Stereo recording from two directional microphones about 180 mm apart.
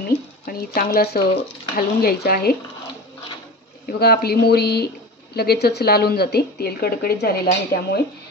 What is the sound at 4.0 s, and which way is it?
Speech, 60° left (ahead or behind).